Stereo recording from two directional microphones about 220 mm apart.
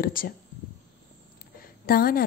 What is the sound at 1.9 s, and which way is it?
Speech, 40° left (ahead or behind).